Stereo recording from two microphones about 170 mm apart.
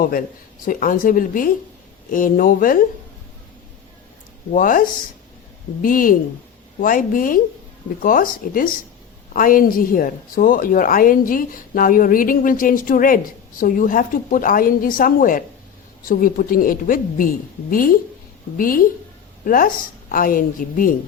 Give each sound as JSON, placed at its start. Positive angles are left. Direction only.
{"t": 0.0, "sound": "a woman's voice", "side_deg": 55}
{"t": 4.5, "sound": "a woman's voice", "side_deg": 55}